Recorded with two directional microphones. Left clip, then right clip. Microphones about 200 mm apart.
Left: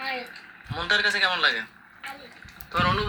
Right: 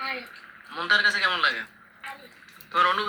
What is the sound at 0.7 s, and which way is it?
Speech, 35° left (ahead or behind).